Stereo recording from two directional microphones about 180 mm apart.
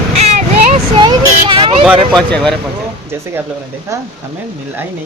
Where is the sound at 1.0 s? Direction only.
30° right (ahead or behind).